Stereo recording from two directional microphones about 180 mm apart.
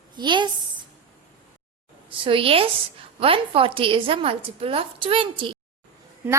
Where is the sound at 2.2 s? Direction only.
30° right (ahead or behind).